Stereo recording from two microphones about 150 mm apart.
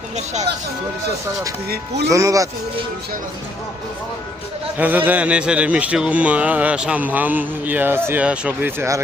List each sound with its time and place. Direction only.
2.0 s speech: 20° right (ahead or behind)
4.8 s speech: 10° right (ahead or behind)